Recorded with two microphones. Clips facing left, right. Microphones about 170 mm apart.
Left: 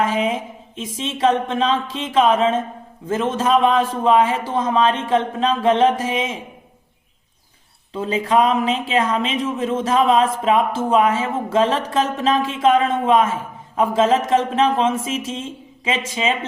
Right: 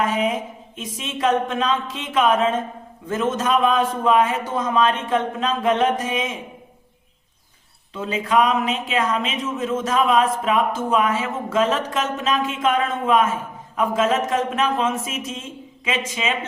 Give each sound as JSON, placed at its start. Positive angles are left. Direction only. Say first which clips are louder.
{"t": 0.0, "sound": "speech", "louder": "left 1 dB", "side_deg": 30}
{"t": 7.9, "sound": "speech", "louder": "left 2 dB", "side_deg": 30}